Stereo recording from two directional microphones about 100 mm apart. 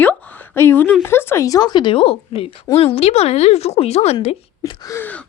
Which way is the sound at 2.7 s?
85° left.